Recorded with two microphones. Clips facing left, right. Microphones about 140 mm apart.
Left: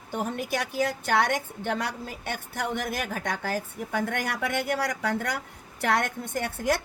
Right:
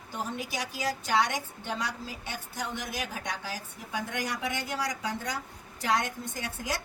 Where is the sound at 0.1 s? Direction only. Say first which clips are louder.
Left 6 dB; 55° left (ahead or behind).